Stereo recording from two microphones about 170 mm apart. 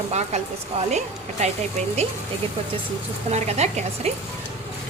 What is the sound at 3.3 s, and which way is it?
Speech, 40° right (ahead or behind).